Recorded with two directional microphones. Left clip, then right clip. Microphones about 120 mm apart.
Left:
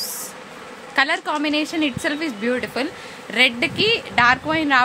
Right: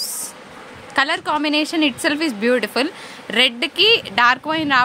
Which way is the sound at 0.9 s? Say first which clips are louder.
Right 1 dB; 50° right (ahead or behind).